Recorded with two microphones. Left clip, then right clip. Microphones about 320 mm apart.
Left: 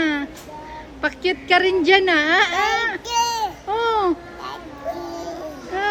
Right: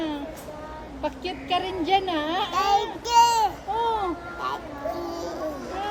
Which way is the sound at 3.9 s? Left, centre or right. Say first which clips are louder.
Left 8 dB; left.